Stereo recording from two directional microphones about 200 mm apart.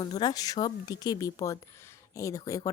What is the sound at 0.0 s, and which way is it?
Speech, 20° left (ahead or behind).